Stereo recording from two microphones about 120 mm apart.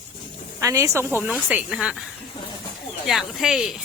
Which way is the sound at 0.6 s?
25° right (ahead or behind).